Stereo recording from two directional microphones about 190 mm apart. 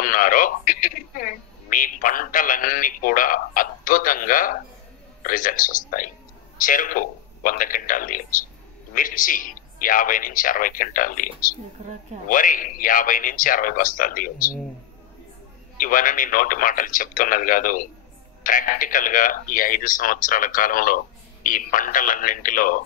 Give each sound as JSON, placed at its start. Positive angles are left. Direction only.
{"t": 0.0, "sound": "speech", "side_deg": 45}
{"t": 15.8, "sound": "speech", "side_deg": 45}